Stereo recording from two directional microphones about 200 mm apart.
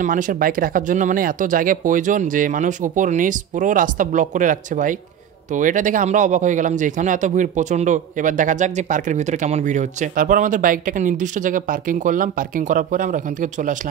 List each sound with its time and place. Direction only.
0.0 s speech: 40° right (ahead or behind)